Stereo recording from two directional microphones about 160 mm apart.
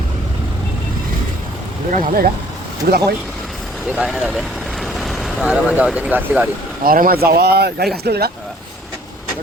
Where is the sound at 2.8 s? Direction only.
70° right (ahead or behind).